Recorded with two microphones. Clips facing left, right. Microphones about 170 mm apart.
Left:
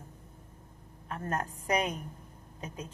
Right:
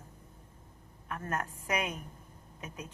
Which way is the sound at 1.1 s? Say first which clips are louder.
Left 2 dB; 30° left (ahead or behind).